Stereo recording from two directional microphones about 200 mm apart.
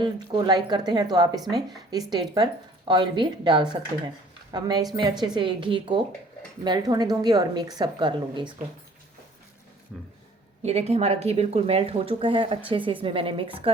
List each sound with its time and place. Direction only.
0.0 s speech: 20° right (ahead or behind)
9.9 s speech: 5° right (ahead or behind)
10.6 s speech: 30° right (ahead or behind)